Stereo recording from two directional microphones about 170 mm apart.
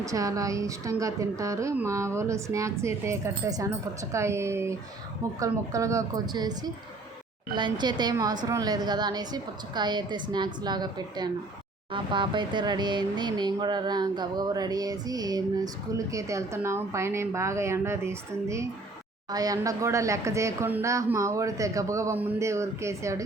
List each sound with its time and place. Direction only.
0.0 s speech: 20° right (ahead or behind)
7.5 s speech: 25° right (ahead or behind)